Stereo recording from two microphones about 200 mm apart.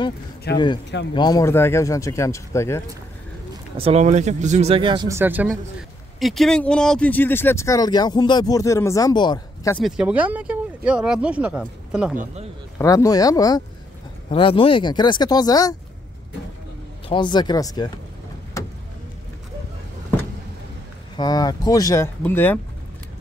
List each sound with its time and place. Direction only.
0.5 s a man's voice: 55° left (ahead or behind)
1.1 s speech: 20° left (ahead or behind)
3.7 s speech: 30° right (ahead or behind); by 9.8 s 20° left (ahead or behind)
9.8 s speech: centre (ahead or behind)
12.7 s speech: 15° left (ahead or behind)
17.1 s speech: 25° left (ahead or behind)
21.2 s speech: 20° left (ahead or behind)